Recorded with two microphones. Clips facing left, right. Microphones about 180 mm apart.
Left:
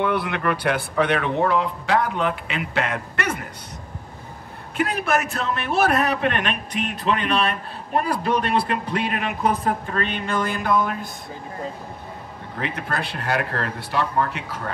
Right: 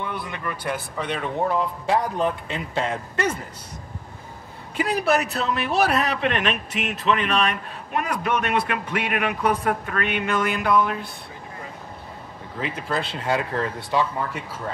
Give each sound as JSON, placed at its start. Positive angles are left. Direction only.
{"t": 0.0, "sound": "speech", "side_deg": 65}
{"t": 4.7, "sound": "a man's voice", "side_deg": 55}
{"t": 10.5, "sound": "a man's voice", "side_deg": 40}
{"t": 12.5, "sound": "speech", "side_deg": 65}